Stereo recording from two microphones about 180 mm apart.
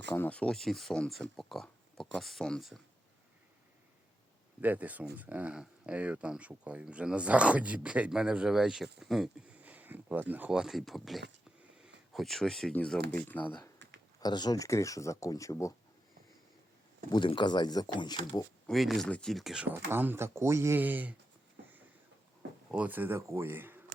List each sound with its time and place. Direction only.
0.1 s speech: 10° left (ahead or behind)
4.6 s speech: 10° right (ahead or behind)
14.2 s speech: 25° left (ahead or behind)
17.1 s speech: 25° left (ahead or behind)
18.7 s speech: centre (ahead or behind)
22.7 s speech: 10° right (ahead or behind)